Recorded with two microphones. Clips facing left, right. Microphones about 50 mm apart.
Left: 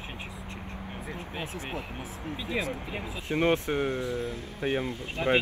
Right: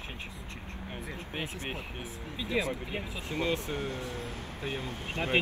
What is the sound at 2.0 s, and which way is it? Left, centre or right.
Speech, left.